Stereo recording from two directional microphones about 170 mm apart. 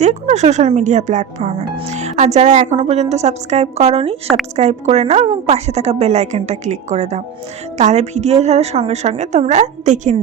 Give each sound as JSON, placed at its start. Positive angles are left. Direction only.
{"t": 0.0, "sound": "speech", "side_deg": -45}